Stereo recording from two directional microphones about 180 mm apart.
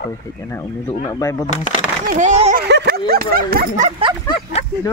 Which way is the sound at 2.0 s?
40° right (ahead or behind).